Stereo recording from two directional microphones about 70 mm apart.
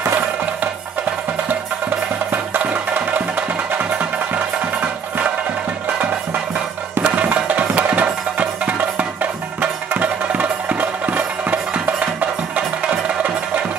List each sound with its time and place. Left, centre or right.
2.3 s music: right
7.0 s music: centre